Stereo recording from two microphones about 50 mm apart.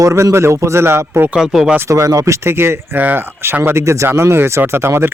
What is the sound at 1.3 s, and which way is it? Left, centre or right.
Speech, centre.